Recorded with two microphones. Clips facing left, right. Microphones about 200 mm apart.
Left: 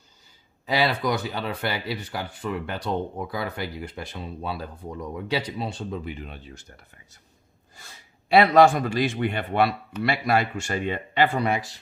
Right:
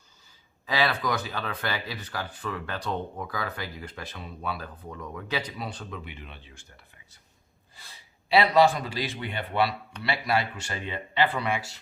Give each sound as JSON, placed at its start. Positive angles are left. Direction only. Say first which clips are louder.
{"t": 0.6, "sound": "a sound", "louder": "left 3 dB", "side_deg": 25}
{"t": 1.0, "sound": "speech", "louder": "left 4 dB", "side_deg": 25}
{"t": 6.1, "sound": "speech", "louder": "left 8 dB", "side_deg": 40}